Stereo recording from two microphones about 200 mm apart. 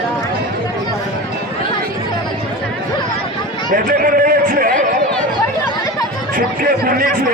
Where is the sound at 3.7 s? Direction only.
45° right (ahead or behind).